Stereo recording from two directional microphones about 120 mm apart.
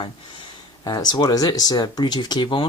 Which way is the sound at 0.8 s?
35° left (ahead or behind).